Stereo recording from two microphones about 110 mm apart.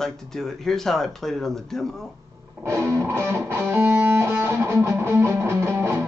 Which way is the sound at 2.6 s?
25° right (ahead or behind).